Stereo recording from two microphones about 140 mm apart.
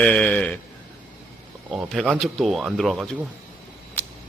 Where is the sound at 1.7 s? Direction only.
Centre (ahead or behind).